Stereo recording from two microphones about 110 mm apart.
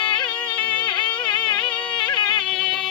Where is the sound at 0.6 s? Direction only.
15° left (ahead or behind).